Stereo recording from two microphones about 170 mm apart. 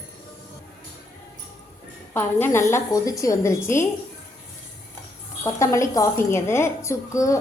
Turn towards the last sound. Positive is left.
turn(degrees=20)  # may be behind; listen again after turning